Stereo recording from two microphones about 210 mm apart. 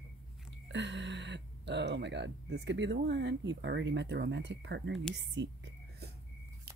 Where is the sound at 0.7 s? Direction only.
60° right (ahead or behind).